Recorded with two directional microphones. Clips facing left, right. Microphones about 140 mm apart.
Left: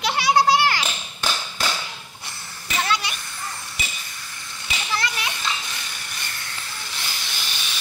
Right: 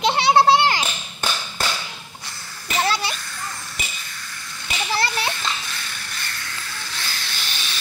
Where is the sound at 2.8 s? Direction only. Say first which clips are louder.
Right 2 dB; 35° right (ahead or behind).